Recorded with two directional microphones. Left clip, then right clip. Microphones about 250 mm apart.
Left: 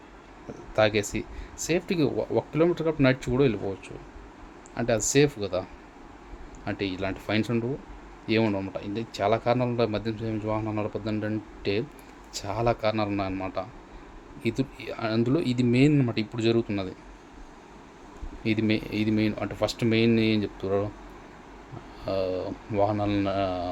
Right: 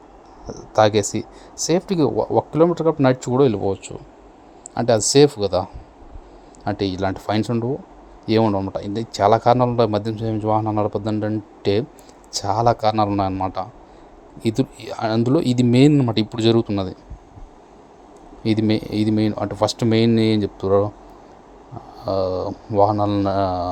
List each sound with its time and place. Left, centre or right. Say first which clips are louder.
0.4 s speech: right 8 dB; centre
0.8 s a man's voice: right 7 dB; centre
6.7 s a man's voice: right 8 dB; right
18.4 s a man's voice: right 6 dB; right
21.9 s a man's voice: right 7 dB; centre